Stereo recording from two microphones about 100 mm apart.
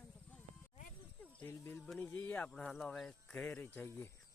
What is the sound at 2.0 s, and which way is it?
Speech, 15° left (ahead or behind).